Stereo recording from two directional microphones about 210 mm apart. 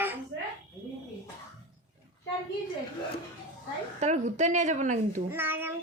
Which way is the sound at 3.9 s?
35° right (ahead or behind).